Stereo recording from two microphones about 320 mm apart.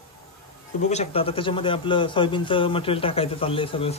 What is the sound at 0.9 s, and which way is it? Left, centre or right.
A man's voice, centre.